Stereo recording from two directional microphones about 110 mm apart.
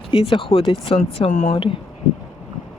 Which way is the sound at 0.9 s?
85° left.